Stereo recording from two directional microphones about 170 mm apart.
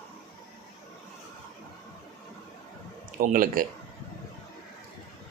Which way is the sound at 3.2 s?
55° right (ahead or behind).